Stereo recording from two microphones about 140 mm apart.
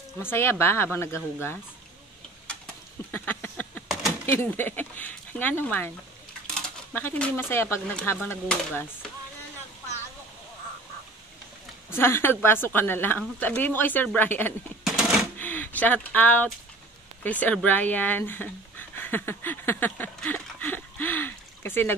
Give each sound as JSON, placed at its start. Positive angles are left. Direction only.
{"t": 0.2, "sound": "speech", "side_deg": 15}
{"t": 3.1, "sound": "a sound", "side_deg": 15}
{"t": 4.3, "sound": "speech", "side_deg": 15}
{"t": 11.9, "sound": "speech", "side_deg": 15}
{"t": 14.9, "sound": "typewriter", "side_deg": -5}
{"t": 15.3, "sound": "a sound", "side_deg": 10}
{"t": 17.2, "sound": "speech", "side_deg": 10}